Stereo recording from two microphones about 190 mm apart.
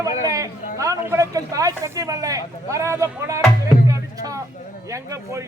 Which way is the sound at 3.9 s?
15° right (ahead or behind).